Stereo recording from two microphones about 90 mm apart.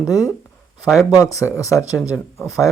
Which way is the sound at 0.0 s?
40° left (ahead or behind).